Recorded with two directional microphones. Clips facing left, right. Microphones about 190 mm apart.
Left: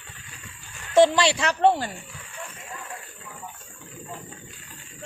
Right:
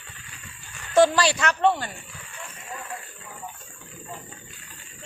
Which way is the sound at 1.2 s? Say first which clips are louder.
Left 1 dB; 25° left (ahead or behind).